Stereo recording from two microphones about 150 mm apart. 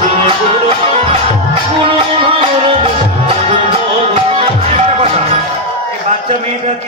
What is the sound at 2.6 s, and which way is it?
Music, 35° right (ahead or behind).